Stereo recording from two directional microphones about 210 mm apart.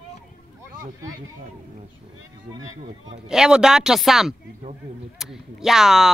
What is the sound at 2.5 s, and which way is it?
Speech, 25° right (ahead or behind).